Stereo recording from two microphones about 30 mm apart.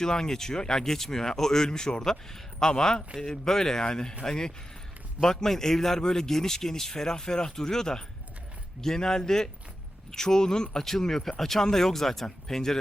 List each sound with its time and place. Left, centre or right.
0.0 s speech: left
0.9 s speech: centre
10.8 s speech: centre